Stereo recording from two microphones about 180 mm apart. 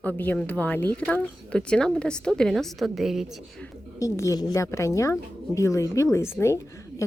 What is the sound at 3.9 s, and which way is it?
A woman's voice, 15° left (ahead or behind).